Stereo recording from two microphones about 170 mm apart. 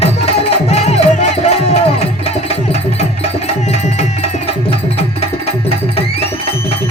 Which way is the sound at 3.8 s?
40° left (ahead or behind).